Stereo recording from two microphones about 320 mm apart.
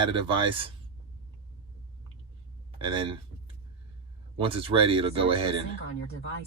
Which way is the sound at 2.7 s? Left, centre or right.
Centre.